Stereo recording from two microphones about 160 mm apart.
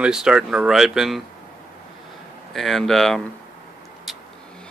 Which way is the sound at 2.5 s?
Centre (ahead or behind).